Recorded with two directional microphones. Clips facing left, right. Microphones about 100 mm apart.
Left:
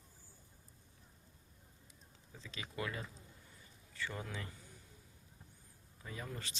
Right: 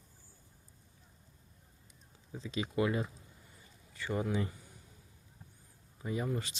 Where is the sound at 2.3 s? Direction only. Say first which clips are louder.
Right 12 dB; 20° right (ahead or behind).